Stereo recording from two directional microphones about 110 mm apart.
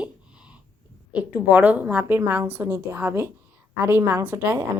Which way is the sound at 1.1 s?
10° right (ahead or behind).